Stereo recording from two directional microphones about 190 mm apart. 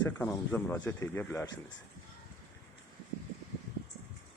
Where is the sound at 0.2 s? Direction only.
10° left (ahead or behind).